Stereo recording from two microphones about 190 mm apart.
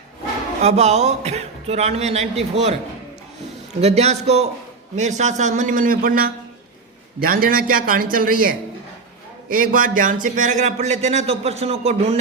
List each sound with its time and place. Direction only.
0.6 s speech: 35° right (ahead or behind)
3.8 s a man's voice: 35° right (ahead or behind)